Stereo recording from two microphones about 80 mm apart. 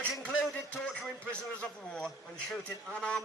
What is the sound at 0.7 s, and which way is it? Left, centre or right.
Speech, centre.